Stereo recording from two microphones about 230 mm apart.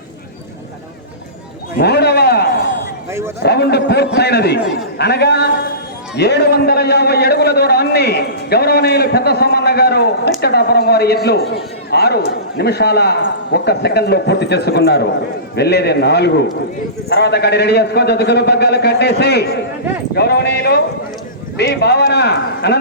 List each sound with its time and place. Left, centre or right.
1.8 s a sound: left
3.1 s a man's voice: centre
3.4 s a man's voice: left